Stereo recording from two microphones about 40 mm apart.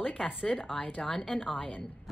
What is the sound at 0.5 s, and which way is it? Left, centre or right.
Speech, centre.